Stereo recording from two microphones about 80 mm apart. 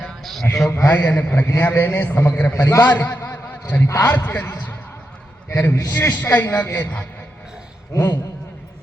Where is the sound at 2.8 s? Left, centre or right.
Left.